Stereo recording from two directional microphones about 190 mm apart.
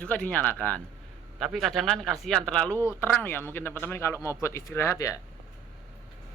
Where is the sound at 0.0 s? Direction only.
5° left (ahead or behind).